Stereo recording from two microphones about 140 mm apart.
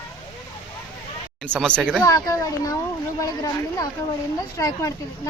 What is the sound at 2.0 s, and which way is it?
Speech, 25° left (ahead or behind).